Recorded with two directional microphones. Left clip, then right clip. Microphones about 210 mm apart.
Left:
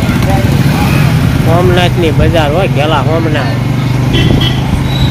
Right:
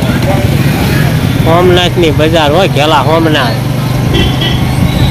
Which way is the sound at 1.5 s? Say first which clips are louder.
Right 3 dB; 20° right (ahead or behind).